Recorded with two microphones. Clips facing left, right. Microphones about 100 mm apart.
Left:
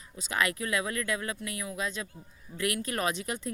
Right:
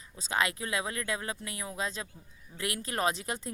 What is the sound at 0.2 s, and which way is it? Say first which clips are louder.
Speech: left 1 dB; 30° right (ahead or behind).